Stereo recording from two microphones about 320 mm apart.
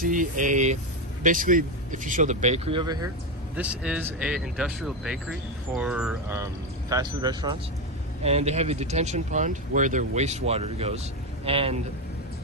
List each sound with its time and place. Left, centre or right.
0.0 s a man's voice: right